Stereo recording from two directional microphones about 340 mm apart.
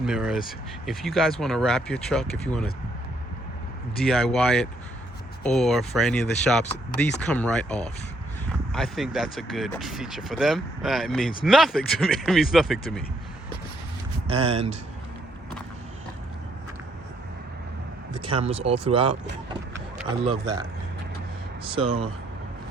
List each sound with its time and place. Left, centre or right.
0.0 s speech: centre
4.0 s speech: centre
14.3 s speech: centre
18.1 s speech: centre
19.7 s vehicle: centre
21.6 s speech: centre